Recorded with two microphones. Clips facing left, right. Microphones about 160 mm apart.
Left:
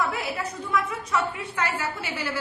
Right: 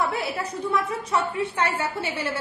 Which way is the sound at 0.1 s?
30° right (ahead or behind).